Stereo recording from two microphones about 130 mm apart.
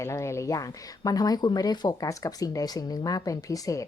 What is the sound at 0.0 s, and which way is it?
Speech, 20° left (ahead or behind).